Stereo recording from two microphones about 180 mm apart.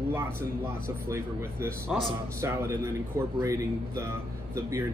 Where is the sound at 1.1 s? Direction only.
15° right (ahead or behind).